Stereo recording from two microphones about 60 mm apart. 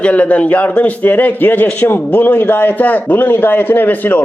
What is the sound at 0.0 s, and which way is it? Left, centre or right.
A man's voice, left.